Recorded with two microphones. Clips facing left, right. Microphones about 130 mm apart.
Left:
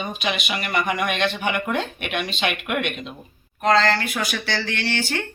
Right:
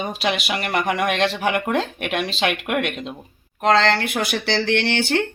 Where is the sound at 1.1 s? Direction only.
90° right.